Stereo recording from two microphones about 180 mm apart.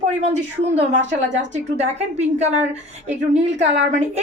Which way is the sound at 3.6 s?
40° right (ahead or behind).